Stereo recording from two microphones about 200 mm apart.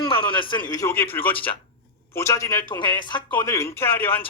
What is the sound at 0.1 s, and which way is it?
Speech, 25° left (ahead or behind).